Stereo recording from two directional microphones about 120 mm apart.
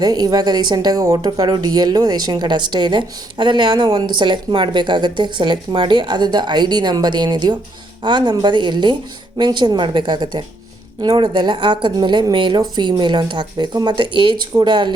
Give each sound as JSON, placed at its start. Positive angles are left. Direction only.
{"t": 0.0, "sound": "speech", "side_deg": -35}